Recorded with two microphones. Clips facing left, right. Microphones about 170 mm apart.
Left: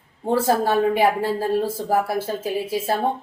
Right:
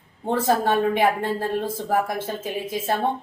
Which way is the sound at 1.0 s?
10° left (ahead or behind).